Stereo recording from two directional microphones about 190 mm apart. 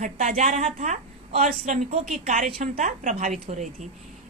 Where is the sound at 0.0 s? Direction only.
40° right (ahead or behind).